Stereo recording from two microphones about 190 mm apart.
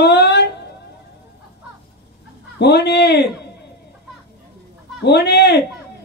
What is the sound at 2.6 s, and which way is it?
Speech, 60° left (ahead or behind).